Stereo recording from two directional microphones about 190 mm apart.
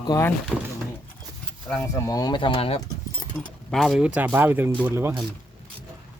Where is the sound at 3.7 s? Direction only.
Centre (ahead or behind); by 5.2 s 15° right (ahead or behind).